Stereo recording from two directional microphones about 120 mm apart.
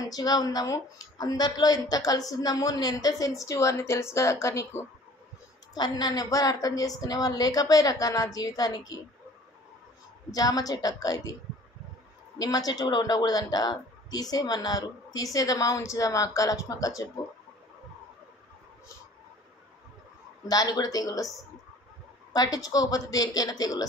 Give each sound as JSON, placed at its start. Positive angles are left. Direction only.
{"t": 0.0, "sound": "a man's voice", "side_deg": 30}
{"t": 5.8, "sound": "a man's voice", "side_deg": 35}
{"t": 10.3, "sound": "a man's voice", "side_deg": 30}
{"t": 12.4, "sound": "a man's voice", "side_deg": 30}
{"t": 20.4, "sound": "a man's voice", "side_deg": 30}
{"t": 22.3, "sound": "a man's voice", "side_deg": 30}